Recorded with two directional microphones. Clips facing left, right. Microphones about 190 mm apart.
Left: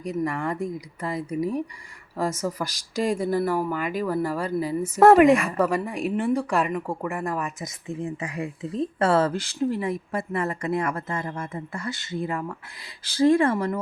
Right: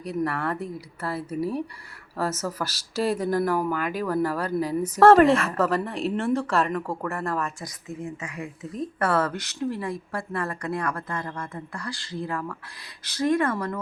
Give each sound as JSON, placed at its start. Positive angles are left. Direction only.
{"t": 0.3, "sound": "speech", "side_deg": 10}
{"t": 7.9, "sound": "speech", "side_deg": 30}